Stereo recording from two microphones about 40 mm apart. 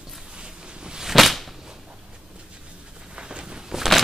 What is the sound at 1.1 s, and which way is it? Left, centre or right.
Whip, centre.